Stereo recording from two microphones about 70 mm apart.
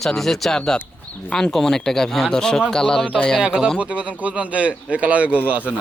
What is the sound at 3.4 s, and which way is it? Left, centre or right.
Speech, centre.